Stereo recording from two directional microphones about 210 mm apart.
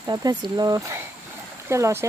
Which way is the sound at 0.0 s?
20° right (ahead or behind).